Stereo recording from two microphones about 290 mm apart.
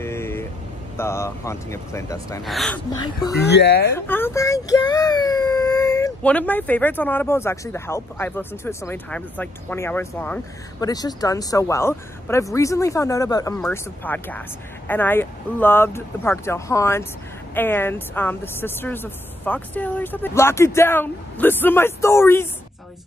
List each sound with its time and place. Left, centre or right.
0.0 s vehicle: centre
0.9 s speech: centre
3.0 s speech: centre
3.5 s speech: left
3.9 s speech: centre